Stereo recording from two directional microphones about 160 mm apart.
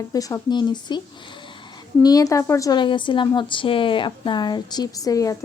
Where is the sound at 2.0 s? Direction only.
25° left (ahead or behind).